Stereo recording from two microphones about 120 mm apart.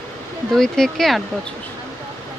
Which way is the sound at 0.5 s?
5° left (ahead or behind).